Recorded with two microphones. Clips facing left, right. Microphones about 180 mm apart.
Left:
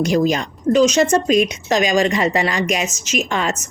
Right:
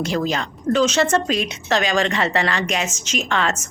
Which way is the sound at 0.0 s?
15° left (ahead or behind).